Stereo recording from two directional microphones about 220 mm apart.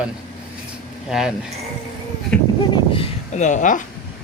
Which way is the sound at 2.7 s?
25° left (ahead or behind).